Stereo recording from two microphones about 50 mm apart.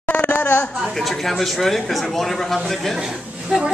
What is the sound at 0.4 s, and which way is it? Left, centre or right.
Speech, left.